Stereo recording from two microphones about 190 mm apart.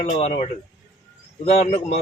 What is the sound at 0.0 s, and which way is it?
Speech, 35° left (ahead or behind).